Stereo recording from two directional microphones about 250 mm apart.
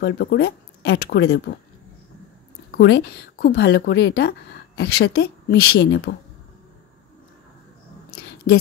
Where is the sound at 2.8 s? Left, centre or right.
Left.